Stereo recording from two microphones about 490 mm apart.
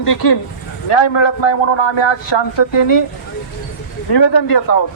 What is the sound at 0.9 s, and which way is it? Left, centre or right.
A man's voice, left.